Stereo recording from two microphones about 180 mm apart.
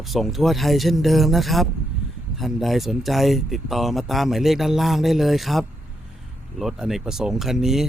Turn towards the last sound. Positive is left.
turn(degrees=0)  # may be behind; listen again after turning